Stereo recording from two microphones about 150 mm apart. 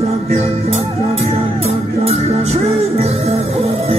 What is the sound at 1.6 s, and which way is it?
Music, 45° right (ahead or behind).